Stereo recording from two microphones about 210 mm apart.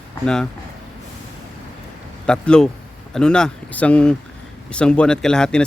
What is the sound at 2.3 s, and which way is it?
Speech, 5° left (ahead or behind).